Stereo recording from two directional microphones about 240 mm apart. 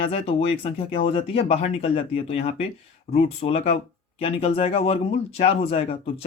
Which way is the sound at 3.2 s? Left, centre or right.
Left.